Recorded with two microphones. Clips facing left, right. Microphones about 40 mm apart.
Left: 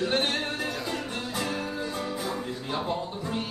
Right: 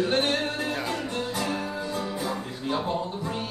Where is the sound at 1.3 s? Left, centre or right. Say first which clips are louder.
Right 2 dB; centre.